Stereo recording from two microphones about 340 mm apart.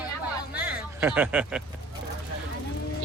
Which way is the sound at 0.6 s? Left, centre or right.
Centre.